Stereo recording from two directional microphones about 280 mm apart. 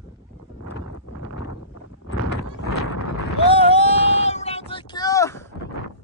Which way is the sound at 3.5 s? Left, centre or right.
Left.